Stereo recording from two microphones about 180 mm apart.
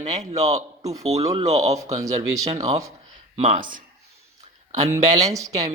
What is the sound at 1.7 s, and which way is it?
Speech, 20° right (ahead or behind).